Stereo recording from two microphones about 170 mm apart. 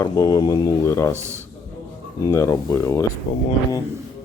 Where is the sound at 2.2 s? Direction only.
20° left (ahead or behind).